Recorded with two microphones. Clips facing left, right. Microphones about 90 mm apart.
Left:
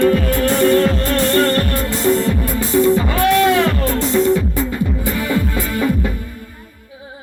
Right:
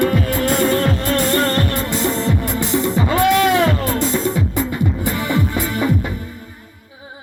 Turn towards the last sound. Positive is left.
turn(degrees=-20)  # may be behind; listen again after turning